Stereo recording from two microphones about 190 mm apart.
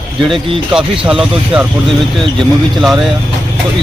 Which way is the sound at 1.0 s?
5° right (ahead or behind).